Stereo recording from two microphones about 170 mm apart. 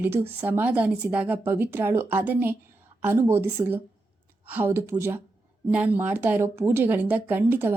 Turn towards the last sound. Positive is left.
turn(degrees=-10)  # may be behind; listen again after turning